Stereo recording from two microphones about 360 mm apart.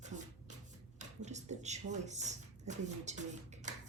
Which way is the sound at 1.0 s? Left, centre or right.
Centre.